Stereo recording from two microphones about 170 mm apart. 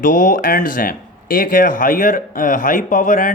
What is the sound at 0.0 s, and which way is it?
Speech, 50° left (ahead or behind).